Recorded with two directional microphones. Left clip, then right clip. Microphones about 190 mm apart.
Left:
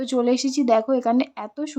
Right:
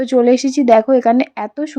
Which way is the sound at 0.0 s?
25° right (ahead or behind).